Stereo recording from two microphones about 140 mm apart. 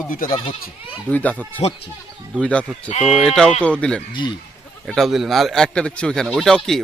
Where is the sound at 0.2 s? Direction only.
80° left.